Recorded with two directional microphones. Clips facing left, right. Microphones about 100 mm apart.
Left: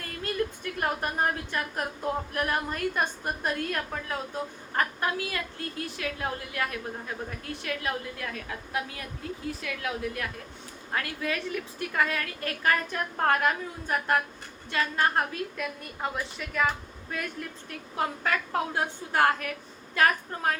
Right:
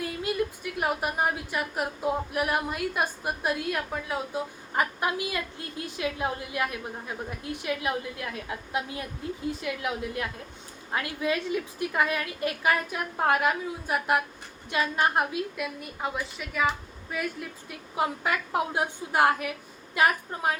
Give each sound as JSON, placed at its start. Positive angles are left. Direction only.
{"t": 0.0, "sound": "a woman's voice", "side_deg": -10}